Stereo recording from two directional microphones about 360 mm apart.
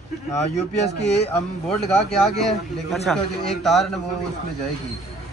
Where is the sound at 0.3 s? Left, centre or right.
Centre.